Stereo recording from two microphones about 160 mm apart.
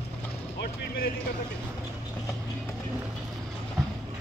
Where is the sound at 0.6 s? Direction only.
70° left (ahead or behind).